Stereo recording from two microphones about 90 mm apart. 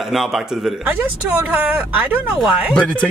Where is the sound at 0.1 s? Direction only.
5° right (ahead or behind).